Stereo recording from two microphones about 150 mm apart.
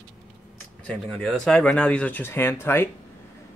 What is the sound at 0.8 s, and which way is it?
Speech, 5° left (ahead or behind).